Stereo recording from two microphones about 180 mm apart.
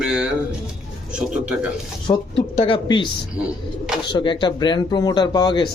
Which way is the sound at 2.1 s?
30° left (ahead or behind).